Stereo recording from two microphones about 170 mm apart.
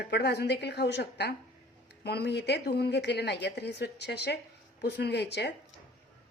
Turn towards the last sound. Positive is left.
turn(degrees=75)  # may be behind; listen again after turning